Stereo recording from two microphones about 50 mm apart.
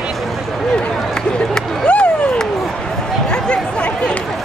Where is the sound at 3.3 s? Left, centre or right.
Centre.